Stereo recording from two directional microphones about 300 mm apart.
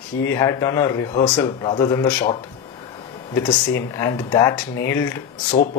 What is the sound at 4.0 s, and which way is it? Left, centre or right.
Speech, centre.